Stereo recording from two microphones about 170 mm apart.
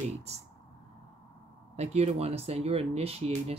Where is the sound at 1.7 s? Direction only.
40° right (ahead or behind).